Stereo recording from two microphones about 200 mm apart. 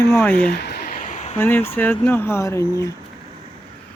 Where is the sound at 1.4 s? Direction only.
10° left (ahead or behind).